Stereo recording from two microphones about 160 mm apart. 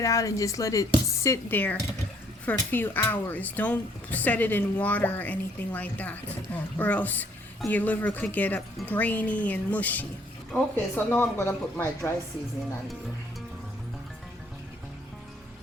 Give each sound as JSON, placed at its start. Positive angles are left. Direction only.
{"t": 0.0, "sound": "speech", "side_deg": 20}